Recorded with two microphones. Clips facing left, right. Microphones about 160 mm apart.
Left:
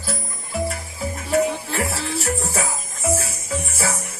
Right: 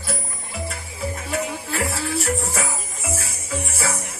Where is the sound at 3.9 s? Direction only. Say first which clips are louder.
Even; 30° right (ahead or behind).